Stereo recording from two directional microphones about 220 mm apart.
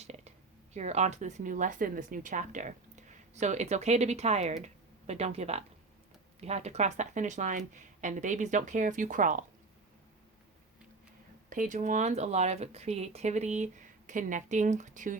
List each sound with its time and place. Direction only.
0.0 s speech: 30° right (ahead or behind)
11.4 s speech: 35° right (ahead or behind)